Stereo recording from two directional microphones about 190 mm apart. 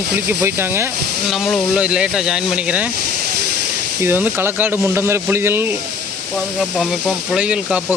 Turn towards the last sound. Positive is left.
turn(degrees=-5)  # may be behind; listen again after turning